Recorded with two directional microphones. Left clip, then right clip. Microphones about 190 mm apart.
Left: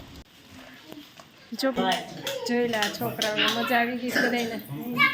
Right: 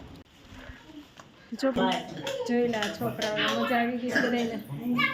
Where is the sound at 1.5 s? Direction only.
45° right (ahead or behind).